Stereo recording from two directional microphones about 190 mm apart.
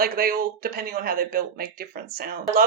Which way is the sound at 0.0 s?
50° right (ahead or behind).